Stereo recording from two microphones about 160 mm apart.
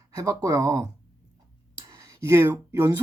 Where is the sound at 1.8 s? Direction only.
20° right (ahead or behind).